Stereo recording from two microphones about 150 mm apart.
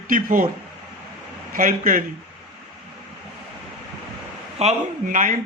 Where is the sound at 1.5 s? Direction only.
65° right (ahead or behind).